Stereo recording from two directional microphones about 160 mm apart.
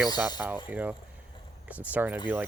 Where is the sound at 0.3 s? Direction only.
10° right (ahead or behind).